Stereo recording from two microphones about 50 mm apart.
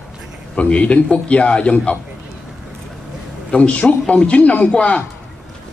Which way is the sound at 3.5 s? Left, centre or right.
Left.